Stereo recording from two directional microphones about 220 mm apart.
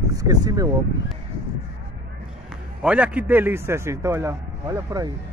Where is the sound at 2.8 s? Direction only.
5° right (ahead or behind).